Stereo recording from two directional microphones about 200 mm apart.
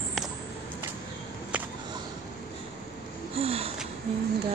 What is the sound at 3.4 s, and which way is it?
Wheeze, 30° right (ahead or behind).